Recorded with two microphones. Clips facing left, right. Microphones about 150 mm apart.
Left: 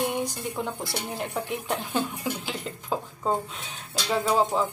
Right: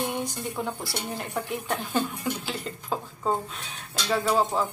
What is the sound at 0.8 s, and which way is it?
Speech, 15° left (ahead or behind).